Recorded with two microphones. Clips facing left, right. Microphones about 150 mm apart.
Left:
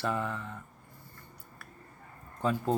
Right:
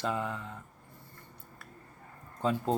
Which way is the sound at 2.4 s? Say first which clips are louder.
Even; 25° right (ahead or behind).